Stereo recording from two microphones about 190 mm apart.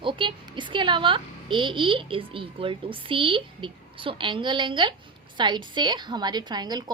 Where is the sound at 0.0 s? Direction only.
25° right (ahead or behind).